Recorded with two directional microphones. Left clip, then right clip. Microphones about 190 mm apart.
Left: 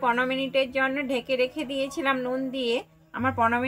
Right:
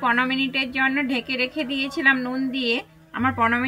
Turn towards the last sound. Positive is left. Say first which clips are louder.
# right 3 dB
turn(degrees=35)  # may be behind; listen again after turning